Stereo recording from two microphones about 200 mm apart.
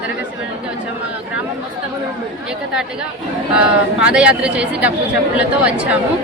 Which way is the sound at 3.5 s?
5° right (ahead or behind).